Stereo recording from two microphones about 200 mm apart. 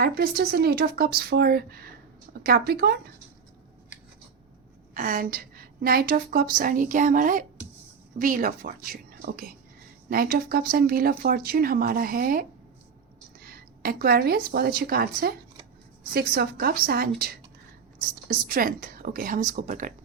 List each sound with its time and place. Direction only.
0.0 s a woman's voice: 50° right (ahead or behind)
4.9 s a woman's voice: 45° right (ahead or behind)
18.3 s a woman's voice: 45° right (ahead or behind)